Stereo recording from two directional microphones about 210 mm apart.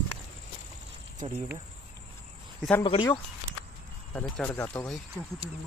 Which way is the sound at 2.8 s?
25° left (ahead or behind).